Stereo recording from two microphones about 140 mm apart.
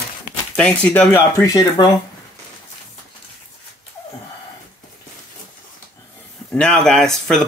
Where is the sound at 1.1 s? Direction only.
25° left (ahead or behind).